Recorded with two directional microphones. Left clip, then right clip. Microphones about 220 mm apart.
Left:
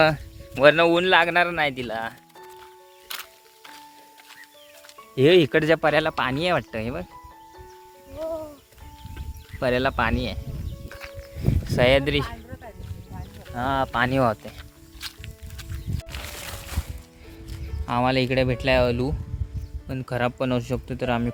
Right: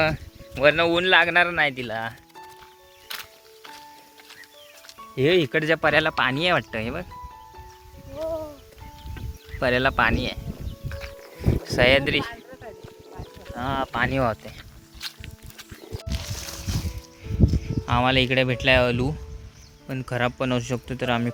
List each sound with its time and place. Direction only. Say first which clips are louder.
0.0 s speech: left 4 dB; 25° left (ahead or behind); by 2.1 s 5° left (ahead or behind)
5.1 s speech: left 3 dB; 30° left (ahead or behind)
5.8 s a man's voice: right 1 dB; 5° left (ahead or behind)
8.2 s music: right 1 dB; 40° right (ahead or behind)
9.6 s a man's voice: right 2 dB; centre (ahead or behind)
10.8 s music: right 2 dB; 5° left (ahead or behind)
11.6 s speech: even; 10° left (ahead or behind)
13.6 s speech: left 2 dB; 25° left (ahead or behind)
15.0 s music: right 1 dB; 10° left (ahead or behind)
17.8 s a man's voice: right 1 dB; centre (ahead or behind)